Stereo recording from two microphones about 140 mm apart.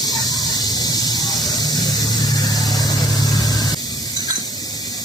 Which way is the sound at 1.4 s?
30° left (ahead or behind).